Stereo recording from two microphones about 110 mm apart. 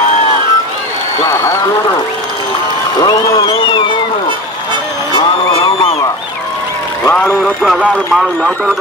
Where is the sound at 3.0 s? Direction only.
30° left (ahead or behind).